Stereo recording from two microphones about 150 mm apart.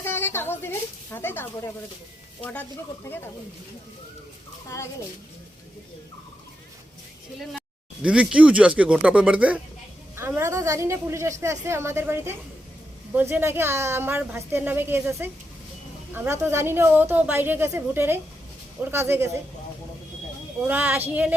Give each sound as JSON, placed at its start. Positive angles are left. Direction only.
{"t": 0.0, "sound": "speech", "side_deg": 15}
{"t": 8.0, "sound": "a woman's voice", "side_deg": -5}
{"t": 20.7, "sound": "a woman's voice", "side_deg": -10}